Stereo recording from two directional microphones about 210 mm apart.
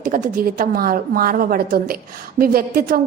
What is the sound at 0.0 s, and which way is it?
A woman's voice, 40° right (ahead or behind).